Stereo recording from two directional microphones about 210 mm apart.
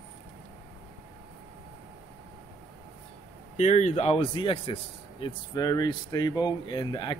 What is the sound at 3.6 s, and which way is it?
A man's voice, 30° left (ahead or behind).